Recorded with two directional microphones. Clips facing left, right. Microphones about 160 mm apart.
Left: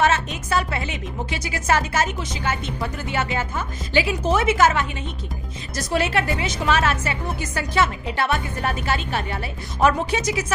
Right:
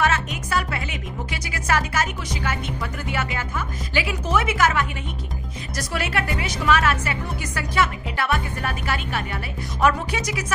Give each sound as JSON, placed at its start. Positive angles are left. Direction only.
{"t": 0.0, "sound": "a woman's voice", "side_deg": 25}